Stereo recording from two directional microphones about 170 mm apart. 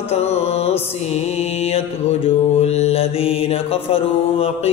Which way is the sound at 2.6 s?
40° left (ahead or behind).